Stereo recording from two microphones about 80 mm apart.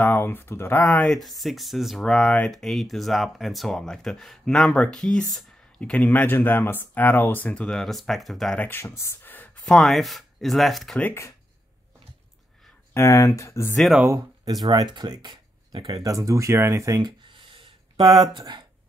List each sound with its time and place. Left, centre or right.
0.0 s speech: left
1.0 s speech: centre
2.0 s speech: centre
7.4 s speech: centre
8.5 s speech: left
8.8 s speech: left
9.2 s a sound: left
9.7 s speech: centre
12.9 s speech: left
14.4 s speech: right
16.0 s speech: right
17.0 s a sound: right
18.3 s speech: right